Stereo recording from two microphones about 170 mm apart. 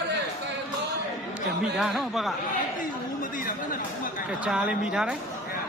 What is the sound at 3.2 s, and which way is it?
Speech, 55° left (ahead or behind).